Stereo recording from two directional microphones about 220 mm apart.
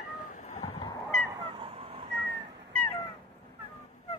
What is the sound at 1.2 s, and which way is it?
Goose, 20° right (ahead or behind).